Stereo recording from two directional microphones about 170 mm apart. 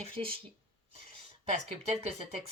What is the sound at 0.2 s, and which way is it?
Speech, 30° right (ahead or behind).